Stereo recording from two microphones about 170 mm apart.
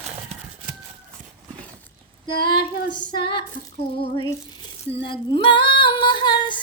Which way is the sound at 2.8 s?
25° left (ahead or behind).